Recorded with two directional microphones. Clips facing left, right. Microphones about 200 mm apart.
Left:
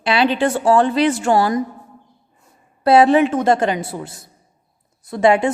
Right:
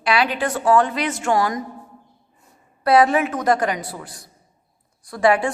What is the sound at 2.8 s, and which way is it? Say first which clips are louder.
A woman's voice: left 4 dB; 30° left (ahead or behind).